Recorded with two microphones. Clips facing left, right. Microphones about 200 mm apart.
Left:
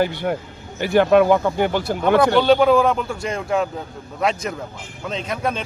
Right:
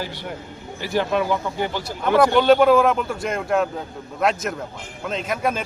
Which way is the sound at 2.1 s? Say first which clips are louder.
Right 1 dB; 5° right (ahead or behind).